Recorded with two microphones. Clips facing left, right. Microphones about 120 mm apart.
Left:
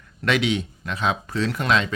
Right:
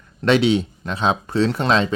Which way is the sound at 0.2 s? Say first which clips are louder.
Right 6 dB; 30° right (ahead or behind).